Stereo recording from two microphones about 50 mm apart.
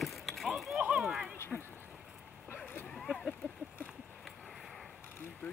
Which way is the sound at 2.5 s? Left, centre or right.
Left.